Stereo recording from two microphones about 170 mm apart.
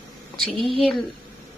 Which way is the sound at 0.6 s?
30° left (ahead or behind).